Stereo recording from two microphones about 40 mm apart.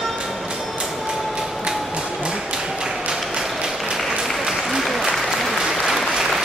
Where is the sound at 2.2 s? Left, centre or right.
Centre.